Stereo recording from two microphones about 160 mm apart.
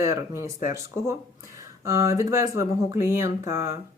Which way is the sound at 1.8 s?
20° right (ahead or behind).